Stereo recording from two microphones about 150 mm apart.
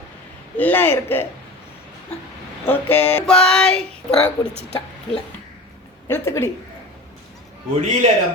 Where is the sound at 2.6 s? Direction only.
10° left (ahead or behind).